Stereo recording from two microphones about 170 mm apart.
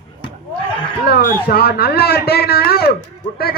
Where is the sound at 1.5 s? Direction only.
65° left (ahead or behind).